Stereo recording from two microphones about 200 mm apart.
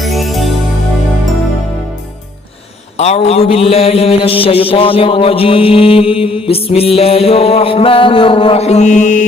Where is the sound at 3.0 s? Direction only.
30° left (ahead or behind).